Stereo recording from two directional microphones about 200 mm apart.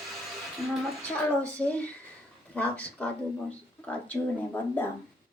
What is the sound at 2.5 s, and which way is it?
Speech, 5° left (ahead or behind).